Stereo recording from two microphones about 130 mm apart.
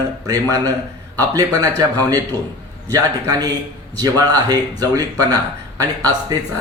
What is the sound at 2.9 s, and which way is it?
Speech, 30° right (ahead or behind).